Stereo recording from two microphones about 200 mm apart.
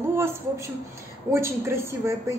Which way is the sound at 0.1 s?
10° right (ahead or behind).